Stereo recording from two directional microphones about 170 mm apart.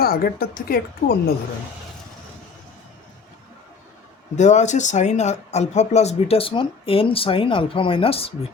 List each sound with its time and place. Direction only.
0.0 s speech: 60° left (ahead or behind)
4.4 s speech: 45° left (ahead or behind)